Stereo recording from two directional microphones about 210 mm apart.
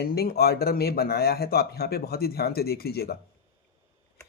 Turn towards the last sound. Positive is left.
turn(degrees=45)  # may be behind; listen again after turning